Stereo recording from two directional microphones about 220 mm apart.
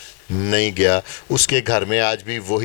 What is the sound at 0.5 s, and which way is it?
A man's voice, 10° left (ahead or behind).